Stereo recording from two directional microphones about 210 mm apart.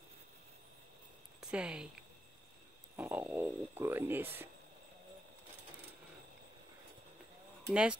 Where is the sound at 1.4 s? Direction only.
5° right (ahead or behind).